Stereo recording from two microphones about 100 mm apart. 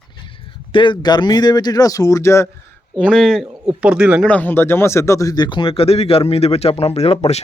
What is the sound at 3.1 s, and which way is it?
Speech, 5° right (ahead or behind).